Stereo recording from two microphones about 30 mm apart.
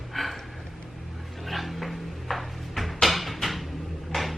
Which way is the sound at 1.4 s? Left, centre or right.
Centre.